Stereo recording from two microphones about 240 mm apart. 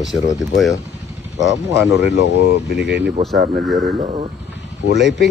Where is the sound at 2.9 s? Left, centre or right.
Right.